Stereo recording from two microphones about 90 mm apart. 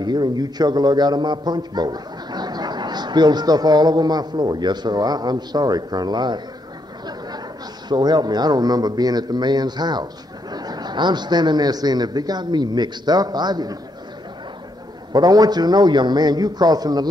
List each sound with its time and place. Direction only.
0.0 s a man's voice: 50° right (ahead or behind)
7.9 s a man's voice: 50° right (ahead or behind)
15.1 s a man's voice: 45° right (ahead or behind)